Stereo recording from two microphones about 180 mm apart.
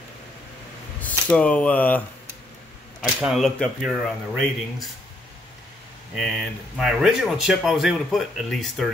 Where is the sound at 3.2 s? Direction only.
Centre (ahead or behind).